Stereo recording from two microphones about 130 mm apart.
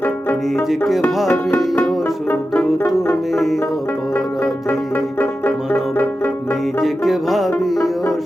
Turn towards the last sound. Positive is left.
turn(degrees=0)  # may be behind; listen again after turning